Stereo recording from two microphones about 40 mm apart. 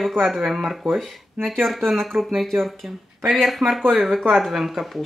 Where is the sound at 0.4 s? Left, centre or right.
Centre.